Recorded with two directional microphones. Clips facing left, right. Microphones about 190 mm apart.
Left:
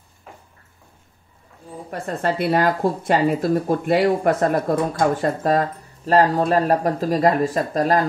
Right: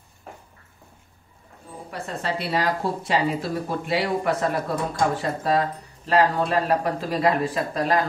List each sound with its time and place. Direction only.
1.9 s speech: 50° left (ahead or behind)